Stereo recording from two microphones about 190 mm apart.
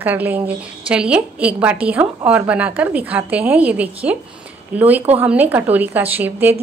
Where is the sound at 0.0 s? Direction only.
10° right (ahead or behind).